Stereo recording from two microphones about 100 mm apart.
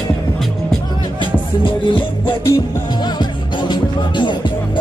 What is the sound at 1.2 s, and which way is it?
Music, 55° left (ahead or behind).